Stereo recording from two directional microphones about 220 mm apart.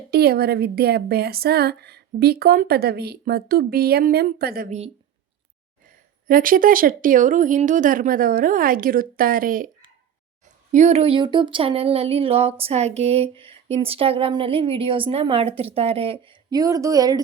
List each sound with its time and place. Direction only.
0.1 s a woman's voice: 45° right (ahead or behind)
6.2 s speech: 40° right (ahead or behind)
10.7 s speech: 30° right (ahead or behind); by 17.2 s 15° right (ahead or behind)